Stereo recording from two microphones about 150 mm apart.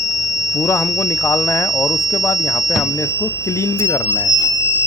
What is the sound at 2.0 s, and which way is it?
Speech, 20° left (ahead or behind).